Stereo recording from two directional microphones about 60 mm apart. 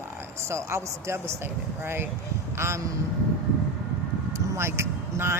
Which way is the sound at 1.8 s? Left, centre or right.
Right.